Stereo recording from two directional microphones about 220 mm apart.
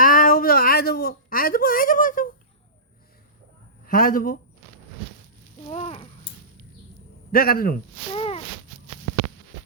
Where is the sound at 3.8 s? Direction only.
40° left (ahead or behind).